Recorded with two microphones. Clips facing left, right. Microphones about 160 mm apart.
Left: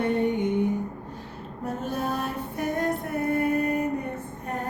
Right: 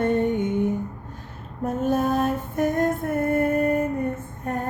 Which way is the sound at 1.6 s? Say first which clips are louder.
Right 7 dB; 45° right (ahead or behind).